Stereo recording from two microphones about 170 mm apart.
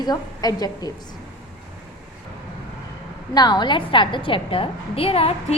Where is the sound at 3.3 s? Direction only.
25° left (ahead or behind).